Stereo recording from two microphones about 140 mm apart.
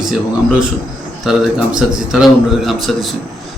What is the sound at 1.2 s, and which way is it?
A man's voice, 5° right (ahead or behind).